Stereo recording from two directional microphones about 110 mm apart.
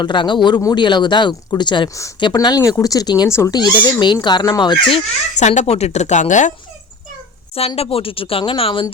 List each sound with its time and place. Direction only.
0.0 s speech: 45° left (ahead or behind)
3.2 s speech: 25° left (ahead or behind)
3.5 s speech: 40° left (ahead or behind)
4.9 s speech: 75° left (ahead or behind); by 6.5 s 90° left
7.8 s speech: 60° left (ahead or behind)